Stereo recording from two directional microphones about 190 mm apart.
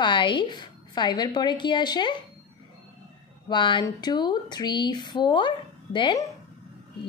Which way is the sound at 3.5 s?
25° left (ahead or behind).